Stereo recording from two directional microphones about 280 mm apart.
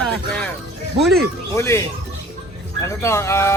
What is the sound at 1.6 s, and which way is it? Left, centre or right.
Speech, centre.